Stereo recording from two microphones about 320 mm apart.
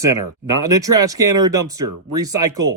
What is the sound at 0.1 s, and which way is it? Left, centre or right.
Speech, right.